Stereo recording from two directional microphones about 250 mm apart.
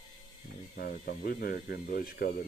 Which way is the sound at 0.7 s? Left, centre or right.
Left.